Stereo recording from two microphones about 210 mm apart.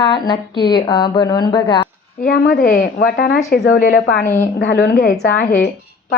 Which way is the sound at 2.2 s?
45° left (ahead or behind).